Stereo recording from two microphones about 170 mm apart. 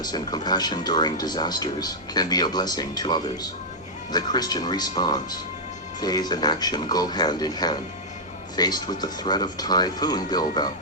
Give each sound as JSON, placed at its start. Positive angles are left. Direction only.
{"t": 0.0, "sound": "speech", "side_deg": 25}